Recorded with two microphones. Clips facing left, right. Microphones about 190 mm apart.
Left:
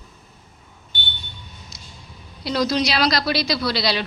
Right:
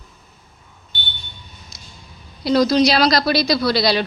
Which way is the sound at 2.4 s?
40° right (ahead or behind).